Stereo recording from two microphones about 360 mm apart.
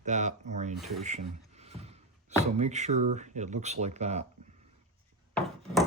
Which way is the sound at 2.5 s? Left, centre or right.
Centre.